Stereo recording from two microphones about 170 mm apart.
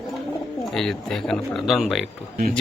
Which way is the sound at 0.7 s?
Centre (ahead or behind).